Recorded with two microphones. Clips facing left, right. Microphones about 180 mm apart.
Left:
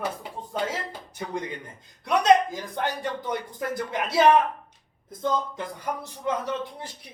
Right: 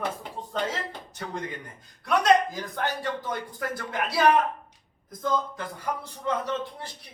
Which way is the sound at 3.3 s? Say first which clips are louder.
Left 2 dB; 20° left (ahead or behind).